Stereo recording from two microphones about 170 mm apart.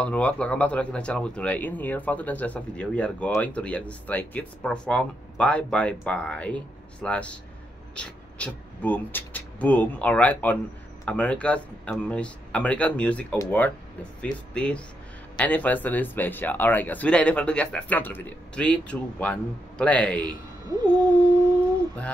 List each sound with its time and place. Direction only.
0.0 s speech: 10° left (ahead or behind)
20.2 s speech: 20° right (ahead or behind)